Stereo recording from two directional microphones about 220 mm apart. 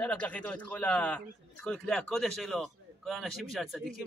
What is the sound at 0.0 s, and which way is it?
A man's voice, 5° left (ahead or behind).